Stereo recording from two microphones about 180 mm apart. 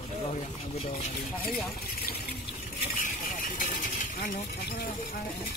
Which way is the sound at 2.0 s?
60° left (ahead or behind).